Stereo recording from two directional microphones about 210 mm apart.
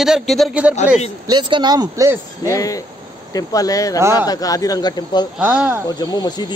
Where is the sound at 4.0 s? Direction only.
15° right (ahead or behind).